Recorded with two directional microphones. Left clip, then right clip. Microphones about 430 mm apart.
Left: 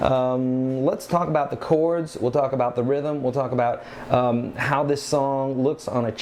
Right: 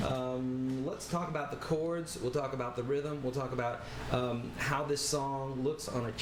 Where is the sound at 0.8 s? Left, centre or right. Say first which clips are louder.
Left 15 dB; left.